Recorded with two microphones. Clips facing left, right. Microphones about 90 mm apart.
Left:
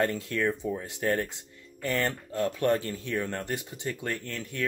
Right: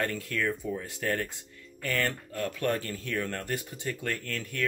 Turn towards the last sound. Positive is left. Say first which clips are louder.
# even
turn(degrees=20)  # may be behind; listen again after turning